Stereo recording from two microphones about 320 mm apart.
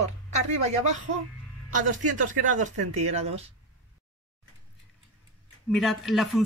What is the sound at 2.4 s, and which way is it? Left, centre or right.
Speech, right.